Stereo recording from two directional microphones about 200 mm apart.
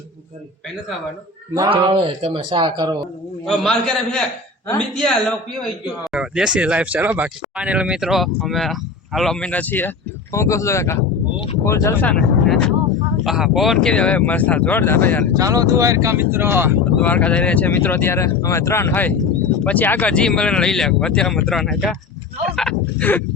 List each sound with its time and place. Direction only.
1.5 s speech: 20° right (ahead or behind)
3.4 s speech: 5° left (ahead or behind)
15.4 s speech: 15° right (ahead or behind)
17.0 s speech: 5° left (ahead or behind)